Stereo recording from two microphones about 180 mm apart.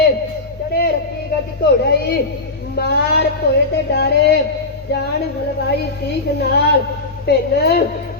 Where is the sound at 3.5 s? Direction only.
65° left (ahead or behind).